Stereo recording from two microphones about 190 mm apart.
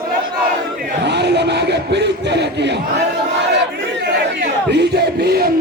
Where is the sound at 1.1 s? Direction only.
60° right (ahead or behind).